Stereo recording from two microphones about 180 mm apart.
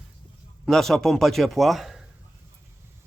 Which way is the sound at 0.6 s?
Centre (ahead or behind).